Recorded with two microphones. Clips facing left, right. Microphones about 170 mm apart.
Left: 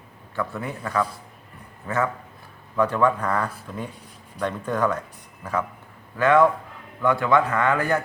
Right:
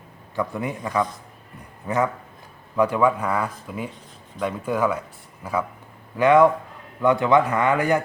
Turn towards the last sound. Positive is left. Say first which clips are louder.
# right 2 dB
turn(degrees=-15)  # may be behind; listen again after turning